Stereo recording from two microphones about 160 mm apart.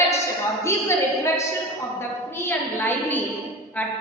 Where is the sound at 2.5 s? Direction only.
10° left (ahead or behind).